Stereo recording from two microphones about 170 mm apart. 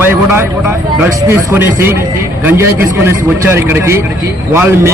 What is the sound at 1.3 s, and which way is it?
A man's voice, 15° right (ahead or behind).